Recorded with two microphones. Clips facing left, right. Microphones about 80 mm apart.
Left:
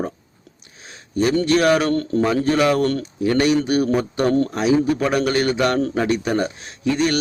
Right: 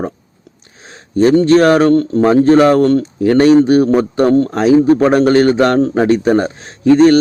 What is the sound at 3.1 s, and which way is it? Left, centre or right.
A man's voice, right.